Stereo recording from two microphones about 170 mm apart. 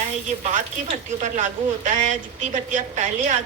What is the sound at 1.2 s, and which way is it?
A woman's voice, 45° right (ahead or behind).